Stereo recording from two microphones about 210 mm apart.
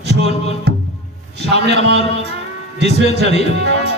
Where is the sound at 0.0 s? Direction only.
55° right (ahead or behind).